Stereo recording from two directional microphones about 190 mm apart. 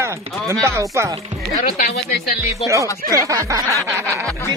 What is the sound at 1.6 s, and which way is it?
Speech, 45° left (ahead or behind).